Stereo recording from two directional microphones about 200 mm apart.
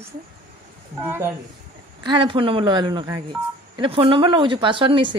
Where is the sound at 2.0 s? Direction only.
25° right (ahead or behind).